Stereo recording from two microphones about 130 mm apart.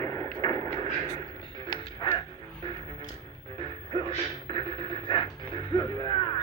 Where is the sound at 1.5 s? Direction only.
40° left (ahead or behind).